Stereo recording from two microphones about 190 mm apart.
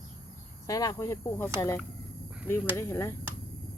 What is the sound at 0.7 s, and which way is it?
Speech, 20° left (ahead or behind).